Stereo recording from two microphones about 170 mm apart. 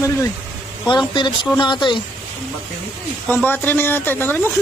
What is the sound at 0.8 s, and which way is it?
Speech, 25° left (ahead or behind).